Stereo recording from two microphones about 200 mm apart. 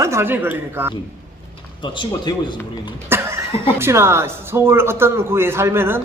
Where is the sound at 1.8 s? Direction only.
25° left (ahead or behind).